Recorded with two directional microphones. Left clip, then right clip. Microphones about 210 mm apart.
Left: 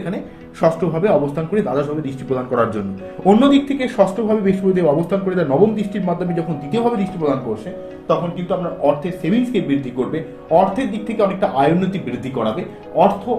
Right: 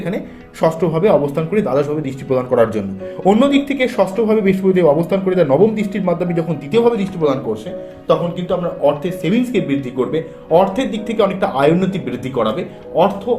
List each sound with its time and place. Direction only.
0.6 s a man's voice: 15° right (ahead or behind)